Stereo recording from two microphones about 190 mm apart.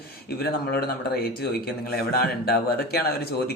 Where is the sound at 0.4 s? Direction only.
55° left (ahead or behind).